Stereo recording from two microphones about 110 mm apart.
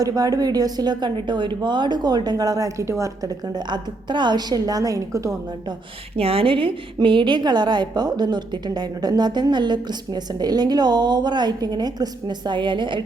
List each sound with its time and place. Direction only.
0.0 s a woman's voice: 35° right (ahead or behind)
3.7 s a woman's voice: 45° right (ahead or behind)
6.1 s a woman's voice: 60° right (ahead or behind)